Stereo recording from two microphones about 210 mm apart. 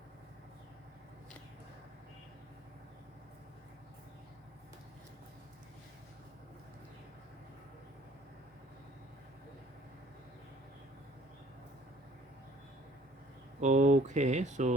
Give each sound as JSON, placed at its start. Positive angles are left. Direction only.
{"t": 13.6, "sound": "speech", "side_deg": -35}